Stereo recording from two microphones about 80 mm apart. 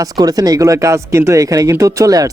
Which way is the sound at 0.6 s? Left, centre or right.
Right.